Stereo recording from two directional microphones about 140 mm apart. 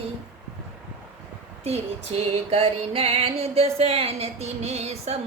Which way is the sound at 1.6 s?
50° right (ahead or behind).